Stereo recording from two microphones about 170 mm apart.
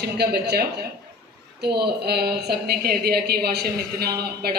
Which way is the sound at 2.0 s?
70° right (ahead or behind).